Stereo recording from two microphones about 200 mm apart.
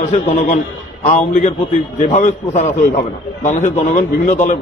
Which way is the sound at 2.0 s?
35° left (ahead or behind).